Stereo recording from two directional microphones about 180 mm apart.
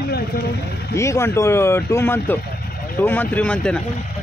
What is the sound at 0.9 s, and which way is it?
Speech, 15° left (ahead or behind).